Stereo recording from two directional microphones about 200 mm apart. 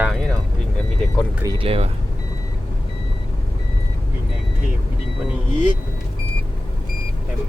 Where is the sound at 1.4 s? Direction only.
30° right (ahead or behind).